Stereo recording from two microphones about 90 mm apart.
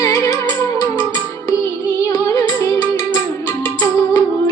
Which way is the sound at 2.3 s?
45° left (ahead or behind).